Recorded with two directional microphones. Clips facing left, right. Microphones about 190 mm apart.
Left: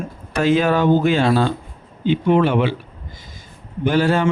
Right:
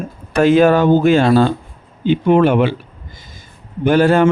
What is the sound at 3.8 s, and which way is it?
Speech, 50° right (ahead or behind).